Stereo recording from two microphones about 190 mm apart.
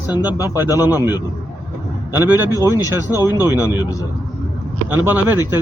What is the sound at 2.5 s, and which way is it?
Speech, 20° left (ahead or behind).